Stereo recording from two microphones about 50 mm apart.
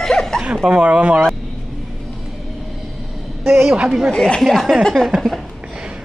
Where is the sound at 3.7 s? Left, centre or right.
Centre.